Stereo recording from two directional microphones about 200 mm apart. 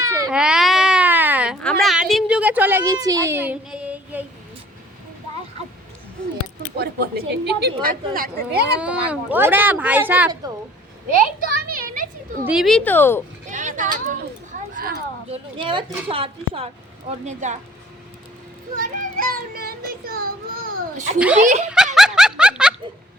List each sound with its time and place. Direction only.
0.0 s baby cry: 15° right (ahead or behind)
0.3 s baby cry: 5° right (ahead or behind)
1.6 s a woman's voice: centre (ahead or behind)
6.7 s speech: 50° right (ahead or behind)
8.8 s a woman's voice: 5° right (ahead or behind)
11.3 s a sound: 45° right (ahead or behind)
12.5 s speech: centre (ahead or behind)
13.5 s a sound: 40° right (ahead or behind)
15.3 s speech: 25° right (ahead or behind)
18.8 s speech: 45° right (ahead or behind)
21.3 s speech: 35° right (ahead or behind)
21.9 s music: 5° right (ahead or behind)